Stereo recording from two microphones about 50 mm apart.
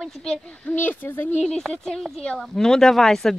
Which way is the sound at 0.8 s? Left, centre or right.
Left.